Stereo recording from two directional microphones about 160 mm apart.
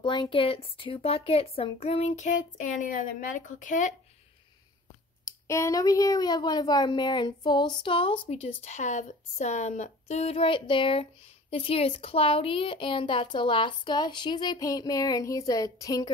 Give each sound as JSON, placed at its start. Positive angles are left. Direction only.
{"t": 0.0, "sound": "a woman's voice", "side_deg": 30}
{"t": 5.2, "sound": "a woman's voice", "side_deg": 20}